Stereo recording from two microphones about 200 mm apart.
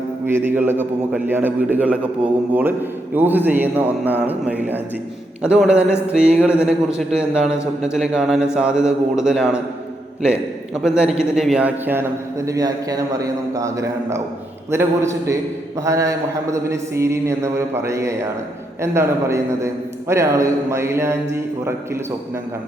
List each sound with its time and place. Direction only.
0.3 s a man's voice: 10° right (ahead or behind)
10.8 s a man's voice: 5° right (ahead or behind)